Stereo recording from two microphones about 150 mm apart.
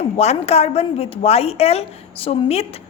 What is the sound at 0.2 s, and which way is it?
A woman's voice, 45° left (ahead or behind).